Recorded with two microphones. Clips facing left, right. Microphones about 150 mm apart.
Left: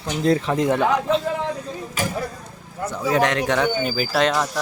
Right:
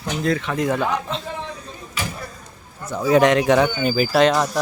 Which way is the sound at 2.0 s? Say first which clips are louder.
Left 3 dB; 45° left (ahead or behind).